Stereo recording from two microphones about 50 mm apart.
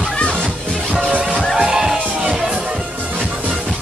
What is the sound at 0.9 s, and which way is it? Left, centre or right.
Music, right.